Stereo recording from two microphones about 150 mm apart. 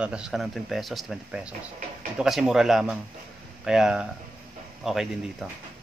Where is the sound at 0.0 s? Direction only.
5° right (ahead or behind).